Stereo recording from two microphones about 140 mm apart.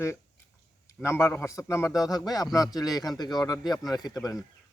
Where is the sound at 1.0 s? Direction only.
20° left (ahead or behind).